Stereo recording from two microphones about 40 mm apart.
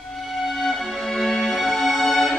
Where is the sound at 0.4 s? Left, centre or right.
Centre.